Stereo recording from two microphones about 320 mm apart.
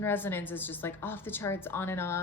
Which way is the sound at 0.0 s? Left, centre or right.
Centre.